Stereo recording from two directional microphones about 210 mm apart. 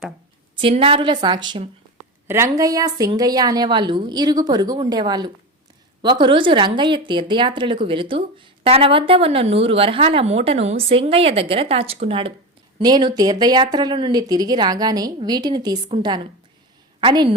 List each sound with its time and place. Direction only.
0.6 s a woman's voice: 25° right (ahead or behind)